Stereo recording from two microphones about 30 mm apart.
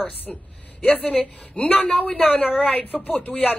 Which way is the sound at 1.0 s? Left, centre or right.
Left.